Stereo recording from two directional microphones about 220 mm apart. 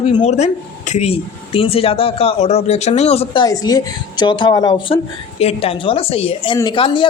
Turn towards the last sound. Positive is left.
turn(degrees=20)  # may be behind; listen again after turning